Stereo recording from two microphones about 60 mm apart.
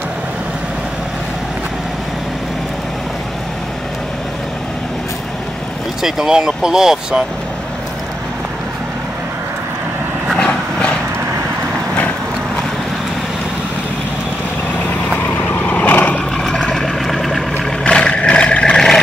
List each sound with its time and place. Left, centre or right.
6.0 s speech: centre
10.3 s vehicle: centre
15.2 s vehicle: left
16.4 s vehicle: centre
17.8 s vehicle: centre